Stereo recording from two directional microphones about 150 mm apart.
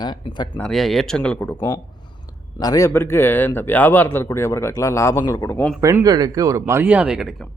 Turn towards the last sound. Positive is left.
turn(degrees=-5)  # may be behind; listen again after turning